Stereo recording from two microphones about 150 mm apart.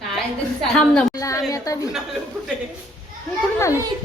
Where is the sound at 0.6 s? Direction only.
5° left (ahead or behind).